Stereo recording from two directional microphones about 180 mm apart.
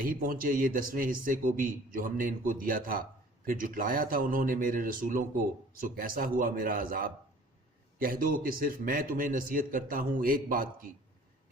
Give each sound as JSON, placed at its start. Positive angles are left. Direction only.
{"t": 0.0, "sound": "a man's voice", "side_deg": -50}